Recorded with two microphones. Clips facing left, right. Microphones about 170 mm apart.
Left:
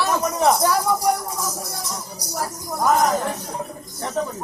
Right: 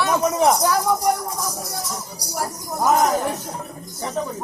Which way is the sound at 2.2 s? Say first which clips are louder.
Left 1 dB; 10° right (ahead or behind).